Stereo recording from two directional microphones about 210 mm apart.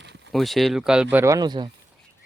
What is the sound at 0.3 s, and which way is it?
Speech, centre (ahead or behind).